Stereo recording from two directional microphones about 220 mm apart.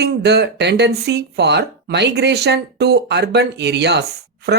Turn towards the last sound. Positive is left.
turn(degrees=-50)  # may be behind; listen again after turning